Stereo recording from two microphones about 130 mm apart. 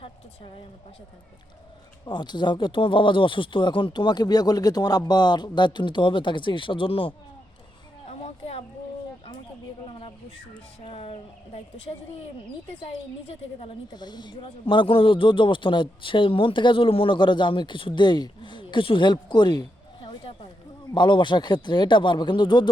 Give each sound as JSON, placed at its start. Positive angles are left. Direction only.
{"t": 2.0, "sound": "speech", "side_deg": 35}
{"t": 8.2, "sound": "speech", "side_deg": 50}
{"t": 10.8, "sound": "speech", "side_deg": 45}
{"t": 13.2, "sound": "speech", "side_deg": 45}
{"t": 13.9, "sound": "speech", "side_deg": 35}